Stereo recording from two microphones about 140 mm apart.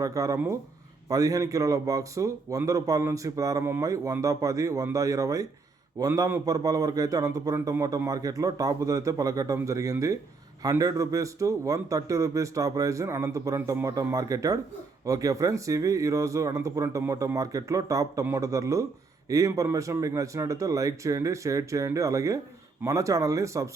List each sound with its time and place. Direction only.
0.0 s a man's voice: 25° right (ahead or behind)